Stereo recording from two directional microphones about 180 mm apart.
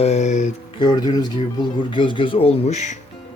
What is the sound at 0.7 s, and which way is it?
Speech, 25° left (ahead or behind).